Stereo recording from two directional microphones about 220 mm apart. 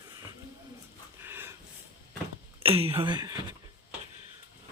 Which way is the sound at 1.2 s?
10° right (ahead or behind).